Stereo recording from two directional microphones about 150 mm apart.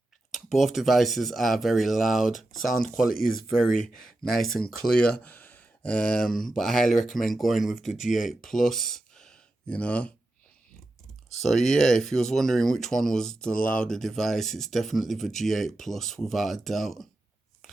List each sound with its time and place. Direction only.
0.3 s speech: centre (ahead or behind)
3.1 s speech: 75° left (ahead or behind)
3.5 s speech: centre (ahead or behind)
11.4 s speech: centre (ahead or behind)
13.5 s speech: 65° left (ahead or behind)
13.7 s speech: 5° left (ahead or behind)